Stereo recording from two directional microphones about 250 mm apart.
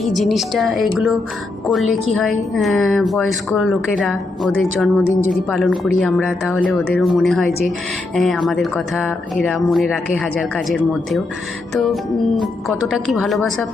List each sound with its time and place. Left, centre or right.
0.0 s speech: centre
13.1 s speech: centre